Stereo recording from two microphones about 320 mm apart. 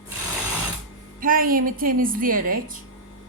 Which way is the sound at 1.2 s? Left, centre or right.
Right.